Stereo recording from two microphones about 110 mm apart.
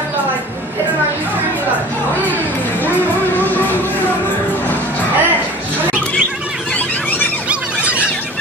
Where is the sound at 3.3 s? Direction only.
15° left (ahead or behind).